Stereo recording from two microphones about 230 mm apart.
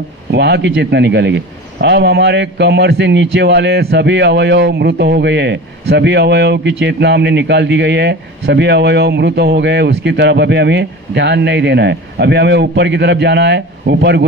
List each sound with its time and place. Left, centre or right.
0.3 s a man's voice: right